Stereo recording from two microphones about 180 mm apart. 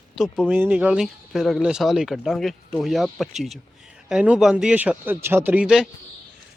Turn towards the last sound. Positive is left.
turn(degrees=-5)  # may be behind; listen again after turning